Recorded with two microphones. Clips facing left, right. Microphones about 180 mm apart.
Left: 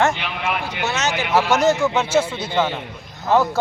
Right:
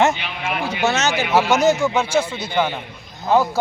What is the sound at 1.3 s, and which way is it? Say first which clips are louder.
Speech: right 1 dB; centre (ahead or behind).